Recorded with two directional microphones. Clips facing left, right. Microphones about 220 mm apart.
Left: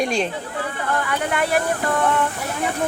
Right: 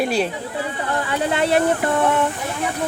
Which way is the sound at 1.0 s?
25° right (ahead or behind).